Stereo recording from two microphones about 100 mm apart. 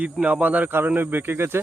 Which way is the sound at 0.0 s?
15° right (ahead or behind).